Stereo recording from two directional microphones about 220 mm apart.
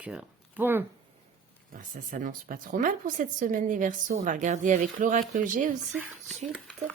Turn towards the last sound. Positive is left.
turn(degrees=0)  # may be behind; listen again after turning